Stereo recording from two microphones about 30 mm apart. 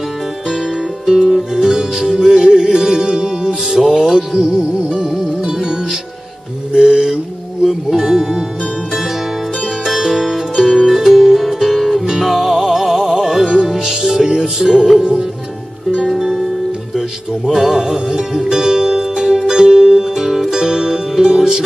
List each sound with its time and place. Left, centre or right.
1.0 s music: right
6.7 s mantra: right
7.6 s music: centre
9.8 s music: centre
17.7 s music: right
20.2 s music: centre
20.5 s music: right